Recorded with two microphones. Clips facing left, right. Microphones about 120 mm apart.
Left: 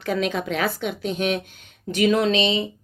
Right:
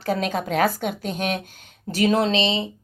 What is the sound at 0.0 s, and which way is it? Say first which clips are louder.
Speech: even; 40° right (ahead or behind).